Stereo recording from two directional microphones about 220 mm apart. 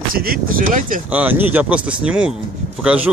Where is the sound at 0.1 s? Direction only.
40° right (ahead or behind).